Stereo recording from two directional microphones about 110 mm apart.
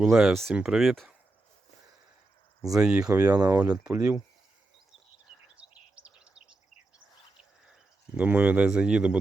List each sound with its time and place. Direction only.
0.0 s speech: 5° right (ahead or behind)
2.6 s speech: 5° right (ahead or behind)
3.2 s speech: 35° right (ahead or behind)
3.6 s speech: 10° right (ahead or behind)
6.1 s bird: 10° right (ahead or behind)
7.7 s speech: 15° right (ahead or behind)